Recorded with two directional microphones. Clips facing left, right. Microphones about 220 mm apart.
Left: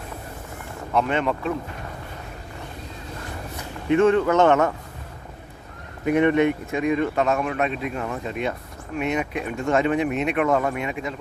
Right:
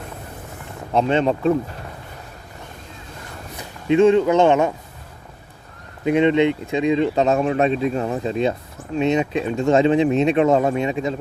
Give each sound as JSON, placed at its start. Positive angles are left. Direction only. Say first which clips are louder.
{"t": 0.9, "sound": "speech", "louder": "right 4 dB", "side_deg": -30}
{"t": 3.8, "sound": "speech", "louder": "right 3 dB", "side_deg": -20}
{"t": 6.1, "sound": "speech", "louder": "right 2 dB", "side_deg": -20}